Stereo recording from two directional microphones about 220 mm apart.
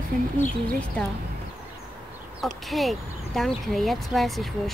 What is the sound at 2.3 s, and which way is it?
Speech, centre (ahead or behind).